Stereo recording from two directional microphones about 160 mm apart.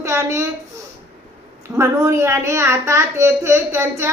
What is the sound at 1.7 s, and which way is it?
A child's voice, 15° right (ahead or behind).